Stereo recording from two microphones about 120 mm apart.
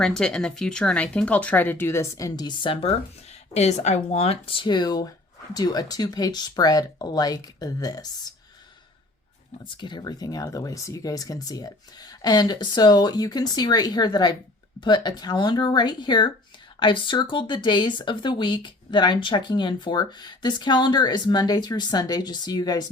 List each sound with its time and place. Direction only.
0.0 s speech: 5° left (ahead or behind); by 2.9 s 45° left (ahead or behind)
3.5 s speech: 65° left (ahead or behind); by 8.0 s 30° left (ahead or behind)
9.6 s speech: 40° left (ahead or behind)